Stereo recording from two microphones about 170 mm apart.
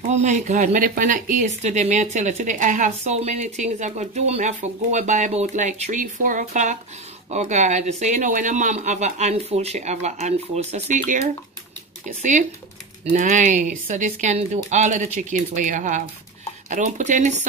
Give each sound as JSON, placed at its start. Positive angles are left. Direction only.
{"t": 0.0, "sound": "speech", "side_deg": -45}